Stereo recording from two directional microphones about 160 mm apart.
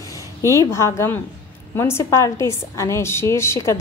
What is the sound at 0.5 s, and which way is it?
A woman's voice, 20° left (ahead or behind).